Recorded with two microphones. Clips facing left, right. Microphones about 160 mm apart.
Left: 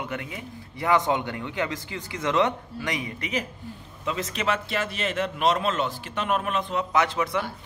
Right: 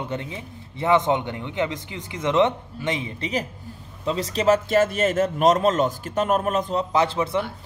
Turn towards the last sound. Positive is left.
turn(degrees=-30)  # may be behind; listen again after turning